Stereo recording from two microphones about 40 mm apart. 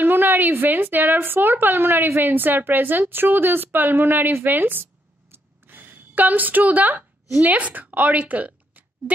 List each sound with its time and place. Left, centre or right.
0.0 s a woman's voice: right